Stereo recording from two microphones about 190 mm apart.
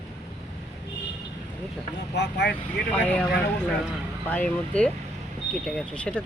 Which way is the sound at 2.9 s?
5° left (ahead or behind).